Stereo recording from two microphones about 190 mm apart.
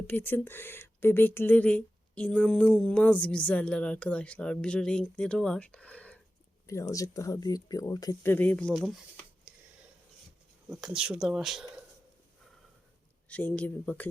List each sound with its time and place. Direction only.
0.1 s speech: 10° left (ahead or behind)
9.5 s a sound: 5° right (ahead or behind)
10.7 s speech: 5° right (ahead or behind)
13.2 s speech: 5° left (ahead or behind)